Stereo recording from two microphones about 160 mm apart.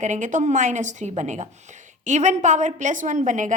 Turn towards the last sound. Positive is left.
turn(degrees=-50)  # may be behind; listen again after turning